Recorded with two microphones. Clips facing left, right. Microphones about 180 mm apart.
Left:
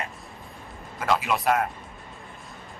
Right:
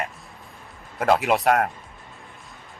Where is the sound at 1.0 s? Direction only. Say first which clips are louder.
Right 5 dB; 65° right (ahead or behind).